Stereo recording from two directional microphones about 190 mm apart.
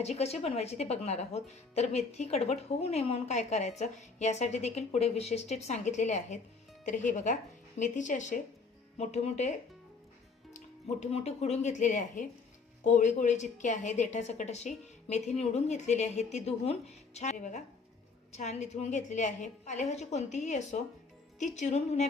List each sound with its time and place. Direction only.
0.0 s a woman's voice: 35° left (ahead or behind)
10.5 s a woman's voice: 35° left (ahead or behind)